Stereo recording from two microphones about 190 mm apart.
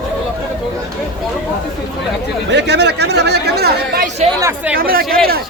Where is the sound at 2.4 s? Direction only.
65° right (ahead or behind).